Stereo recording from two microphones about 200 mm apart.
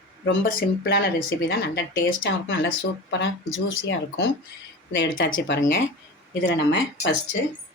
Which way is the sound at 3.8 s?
80° left.